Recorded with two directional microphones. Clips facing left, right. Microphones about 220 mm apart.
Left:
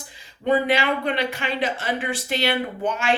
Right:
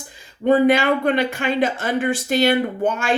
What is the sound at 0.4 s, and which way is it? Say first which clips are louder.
Speech: right 6 dB; 45° right (ahead or behind).